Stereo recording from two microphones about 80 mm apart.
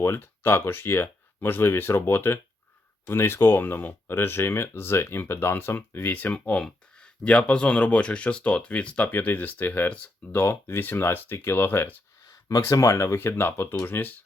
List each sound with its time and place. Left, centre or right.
0.0 s speech: left
12.3 s a sound: left
12.7 s speech: left
13.1 s speech: left